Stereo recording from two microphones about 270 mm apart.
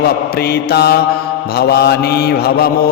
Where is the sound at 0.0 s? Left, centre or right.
Left.